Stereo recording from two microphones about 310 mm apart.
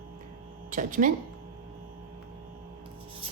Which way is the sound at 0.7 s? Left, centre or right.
Right.